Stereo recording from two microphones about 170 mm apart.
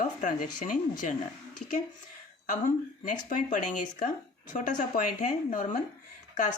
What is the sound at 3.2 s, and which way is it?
Speech, 50° left (ahead or behind).